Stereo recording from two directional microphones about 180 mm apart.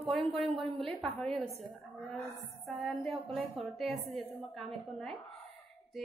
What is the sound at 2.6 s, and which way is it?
A woman's voice, centre (ahead or behind).